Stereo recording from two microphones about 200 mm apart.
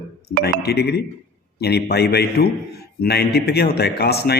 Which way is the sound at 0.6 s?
55° left (ahead or behind).